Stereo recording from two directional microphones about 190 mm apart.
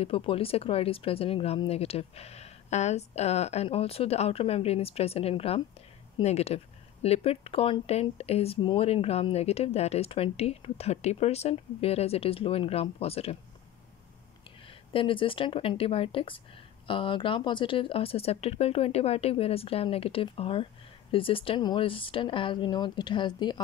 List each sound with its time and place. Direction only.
0.0 s speech: 30° left (ahead or behind)
14.9 s speech: 25° left (ahead or behind)